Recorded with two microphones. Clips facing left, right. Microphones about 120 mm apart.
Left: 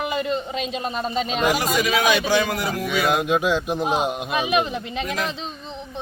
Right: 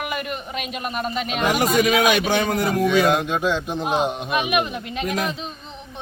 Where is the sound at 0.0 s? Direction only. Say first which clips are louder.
Left 4 dB; 20° left (ahead or behind).